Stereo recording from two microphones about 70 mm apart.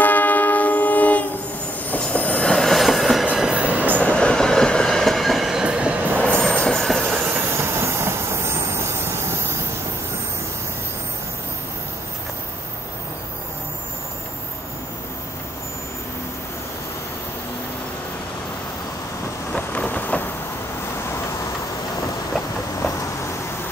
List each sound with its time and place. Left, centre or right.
0.0 s music: left
1.9 s train: left; by 3.3 s centre
3.3 s train: centre
4.0 s train: centre
6.4 s train: centre
7.3 s train: right
19.5 s rain: centre